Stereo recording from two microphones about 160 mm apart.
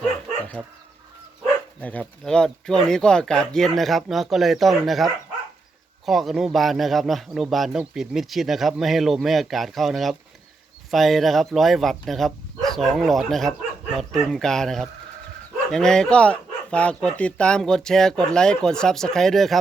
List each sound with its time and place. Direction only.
0.6 s chicken: 25° right (ahead or behind)
1.8 s a man's voice: 10° left (ahead or behind)